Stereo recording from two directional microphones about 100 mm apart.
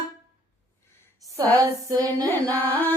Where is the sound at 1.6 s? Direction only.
35° right (ahead or behind).